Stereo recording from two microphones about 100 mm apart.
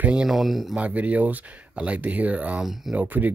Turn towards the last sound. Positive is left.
turn(degrees=-15)  # may be behind; listen again after turning